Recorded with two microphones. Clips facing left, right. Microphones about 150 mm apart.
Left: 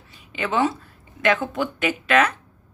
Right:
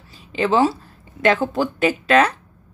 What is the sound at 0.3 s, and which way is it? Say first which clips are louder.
Speech: right 5 dB; 30° right (ahead or behind).